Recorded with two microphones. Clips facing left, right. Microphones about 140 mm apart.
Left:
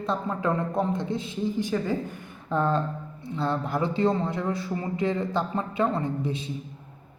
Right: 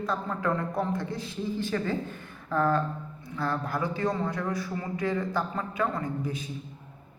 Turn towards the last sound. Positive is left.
turn(degrees=25)  # may be behind; listen again after turning